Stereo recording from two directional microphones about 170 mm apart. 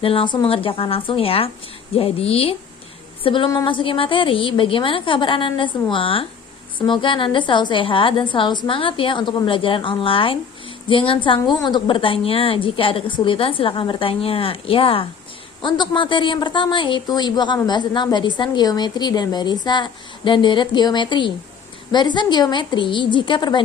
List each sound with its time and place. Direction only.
0.0 s a woman's voice: 30° left (ahead or behind)